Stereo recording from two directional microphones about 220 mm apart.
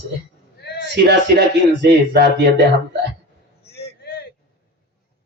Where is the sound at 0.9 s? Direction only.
50° right (ahead or behind).